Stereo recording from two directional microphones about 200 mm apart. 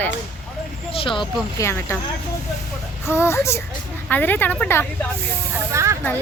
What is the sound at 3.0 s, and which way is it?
Speech, 15° left (ahead or behind).